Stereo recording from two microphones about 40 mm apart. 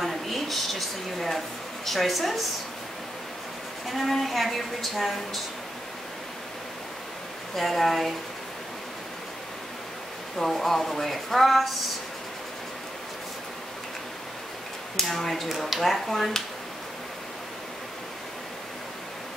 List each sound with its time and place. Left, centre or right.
0.0 s a woman's voice: centre
3.8 s a woman's voice: centre
7.5 s a woman's voice: centre
10.4 s a woman's voice: centre
15.0 s a woman's voice: centre